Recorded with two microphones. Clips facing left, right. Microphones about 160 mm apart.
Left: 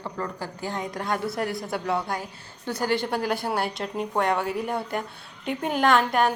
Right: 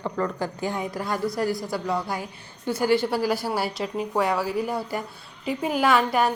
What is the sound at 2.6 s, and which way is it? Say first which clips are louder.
A woman's voice: right 4 dB; 10° right (ahead or behind).